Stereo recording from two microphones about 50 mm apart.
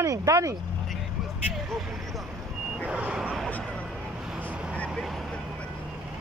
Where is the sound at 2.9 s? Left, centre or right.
Right.